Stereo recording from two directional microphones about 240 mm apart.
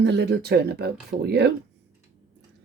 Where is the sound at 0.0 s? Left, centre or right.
Right.